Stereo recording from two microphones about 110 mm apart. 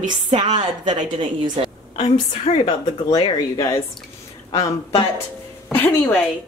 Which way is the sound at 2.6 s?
35° left (ahead or behind).